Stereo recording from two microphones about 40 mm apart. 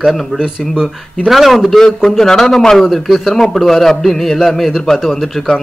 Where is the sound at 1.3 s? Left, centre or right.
Centre.